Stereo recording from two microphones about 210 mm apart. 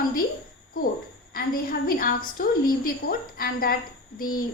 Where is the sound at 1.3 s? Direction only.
45° left (ahead or behind).